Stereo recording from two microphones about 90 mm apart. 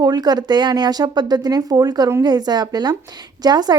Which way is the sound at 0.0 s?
50° right (ahead or behind).